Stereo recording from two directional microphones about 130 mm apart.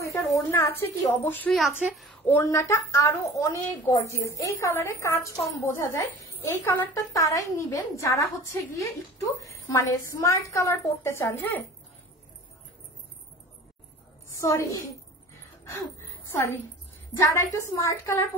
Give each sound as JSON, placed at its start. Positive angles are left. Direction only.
{"t": 0.0, "sound": "a woman's voice", "side_deg": 25}
{"t": 1.9, "sound": "a woman's voice", "side_deg": 0}
{"t": 2.2, "sound": "a woman's voice", "side_deg": 15}
{"t": 14.3, "sound": "a woman's voice", "side_deg": 25}
{"t": 16.3, "sound": "a woman's voice", "side_deg": 20}